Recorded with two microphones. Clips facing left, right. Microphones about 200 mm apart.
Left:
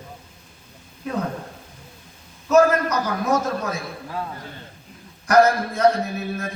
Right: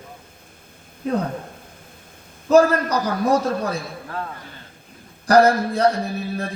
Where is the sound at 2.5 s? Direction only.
30° right (ahead or behind).